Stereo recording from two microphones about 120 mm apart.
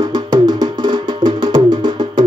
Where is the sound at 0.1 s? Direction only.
35° right (ahead or behind).